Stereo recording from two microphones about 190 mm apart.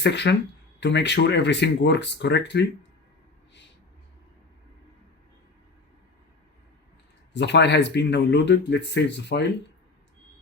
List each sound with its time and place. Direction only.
0.0 s speech: 65° left (ahead or behind)
7.3 s speech: 65° left (ahead or behind)